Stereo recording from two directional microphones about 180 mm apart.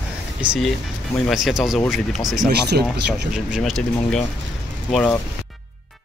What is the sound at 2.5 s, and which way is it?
Speech, 65° right (ahead or behind).